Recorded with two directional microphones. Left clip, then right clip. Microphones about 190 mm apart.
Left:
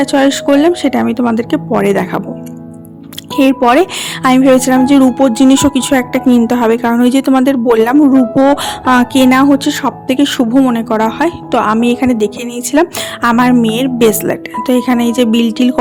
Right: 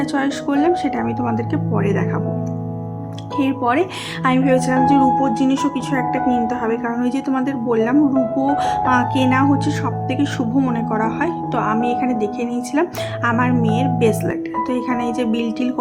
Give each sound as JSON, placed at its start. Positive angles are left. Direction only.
{"t": 0.0, "sound": "a woman's voice", "side_deg": 45}
{"t": 3.3, "sound": "a woman's voice", "side_deg": 45}